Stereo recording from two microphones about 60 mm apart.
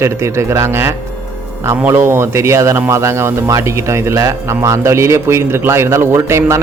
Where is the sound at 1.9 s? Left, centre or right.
Right.